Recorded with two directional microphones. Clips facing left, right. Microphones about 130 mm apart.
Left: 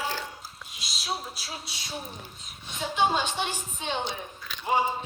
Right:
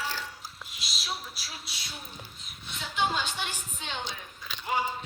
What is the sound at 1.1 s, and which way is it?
Music, 30° left (ahead or behind).